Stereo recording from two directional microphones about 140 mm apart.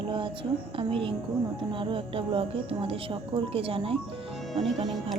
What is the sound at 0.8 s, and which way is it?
Speech, 40° right (ahead or behind).